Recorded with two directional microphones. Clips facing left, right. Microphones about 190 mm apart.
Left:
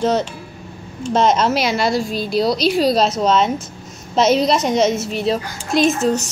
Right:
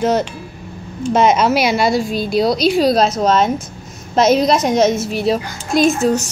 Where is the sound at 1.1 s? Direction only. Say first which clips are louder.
Right 2 dB; 10° right (ahead or behind).